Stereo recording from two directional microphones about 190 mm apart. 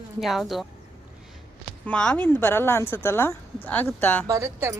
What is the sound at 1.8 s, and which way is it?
Speech, 5° left (ahead or behind).